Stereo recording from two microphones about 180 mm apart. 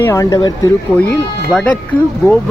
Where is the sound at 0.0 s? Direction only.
15° left (ahead or behind).